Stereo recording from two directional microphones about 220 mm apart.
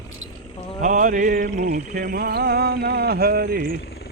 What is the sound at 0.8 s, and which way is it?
Mantra, 35° right (ahead or behind).